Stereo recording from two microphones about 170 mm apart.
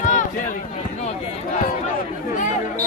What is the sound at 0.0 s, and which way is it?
Run, 45° left (ahead or behind).